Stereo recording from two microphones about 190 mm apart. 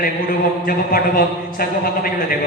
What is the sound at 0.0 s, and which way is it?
A man's voice, 50° left (ahead or behind).